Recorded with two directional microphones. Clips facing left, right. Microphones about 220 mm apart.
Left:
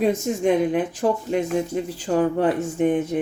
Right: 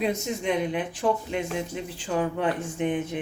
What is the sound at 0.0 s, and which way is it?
Speech, 45° left (ahead or behind).